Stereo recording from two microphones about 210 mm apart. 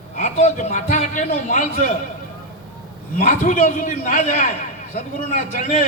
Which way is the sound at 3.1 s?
35° left (ahead or behind).